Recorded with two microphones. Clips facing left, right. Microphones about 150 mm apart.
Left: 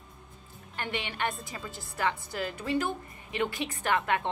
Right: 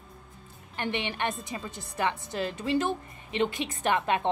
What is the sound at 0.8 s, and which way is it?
Speech, 20° right (ahead or behind).